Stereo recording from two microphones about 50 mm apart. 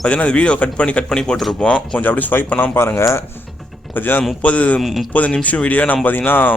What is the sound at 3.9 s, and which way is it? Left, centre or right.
Speech, left.